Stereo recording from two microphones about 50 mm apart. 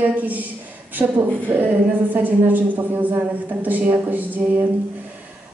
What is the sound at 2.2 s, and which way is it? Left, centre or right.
A woman's voice, right.